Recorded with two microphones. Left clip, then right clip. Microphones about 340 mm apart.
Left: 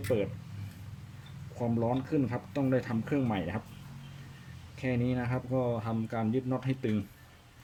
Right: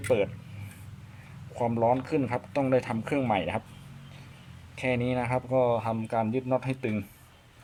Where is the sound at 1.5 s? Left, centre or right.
Right.